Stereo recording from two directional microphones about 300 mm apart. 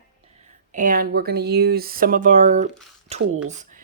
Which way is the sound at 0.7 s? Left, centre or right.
Right.